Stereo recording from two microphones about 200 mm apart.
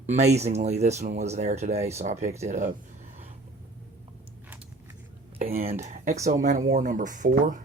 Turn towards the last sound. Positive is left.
turn(degrees=-40)  # may be behind; listen again after turning